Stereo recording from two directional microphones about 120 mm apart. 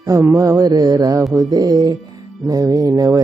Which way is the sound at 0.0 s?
25° right (ahead or behind).